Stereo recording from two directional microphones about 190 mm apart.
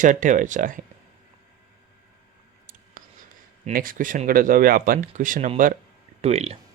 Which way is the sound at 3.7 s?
45° right (ahead or behind).